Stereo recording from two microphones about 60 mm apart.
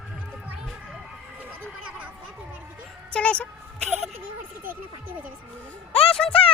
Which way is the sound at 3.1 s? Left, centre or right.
Centre.